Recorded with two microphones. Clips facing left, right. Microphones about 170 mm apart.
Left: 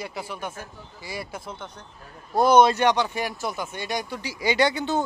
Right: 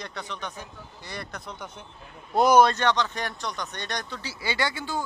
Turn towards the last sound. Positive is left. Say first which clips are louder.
# left 7 dB
turn(degrees=20)  # may be behind; listen again after turning